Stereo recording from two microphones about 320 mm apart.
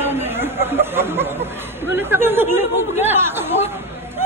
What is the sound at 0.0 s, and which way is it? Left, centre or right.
Speech, centre.